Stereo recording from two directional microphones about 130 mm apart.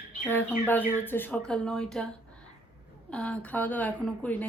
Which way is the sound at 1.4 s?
5° left (ahead or behind).